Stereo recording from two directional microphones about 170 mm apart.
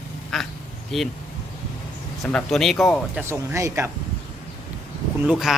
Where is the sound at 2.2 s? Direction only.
5° left (ahead or behind).